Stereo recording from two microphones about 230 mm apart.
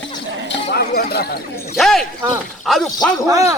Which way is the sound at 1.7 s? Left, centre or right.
Centre.